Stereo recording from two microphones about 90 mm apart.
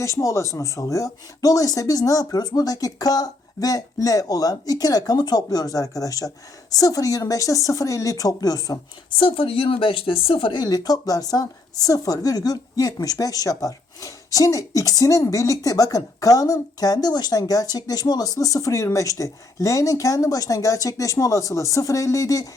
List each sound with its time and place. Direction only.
0.0 s speech: 35° left (ahead or behind)
9.0 s a woman's voice: 75° left (ahead or behind)
10.6 s speech: 45° left (ahead or behind)